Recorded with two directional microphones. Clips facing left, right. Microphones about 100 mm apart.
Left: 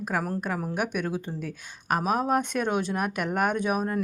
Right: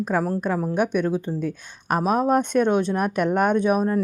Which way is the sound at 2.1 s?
5° left (ahead or behind).